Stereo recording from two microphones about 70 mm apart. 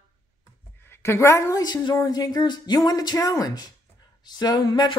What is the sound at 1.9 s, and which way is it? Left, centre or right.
Speech, left.